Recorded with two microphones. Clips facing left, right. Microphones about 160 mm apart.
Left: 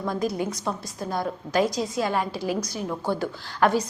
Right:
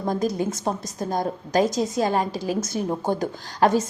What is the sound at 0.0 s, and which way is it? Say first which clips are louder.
A woman's voice: right 3 dB; 40° right (ahead or behind).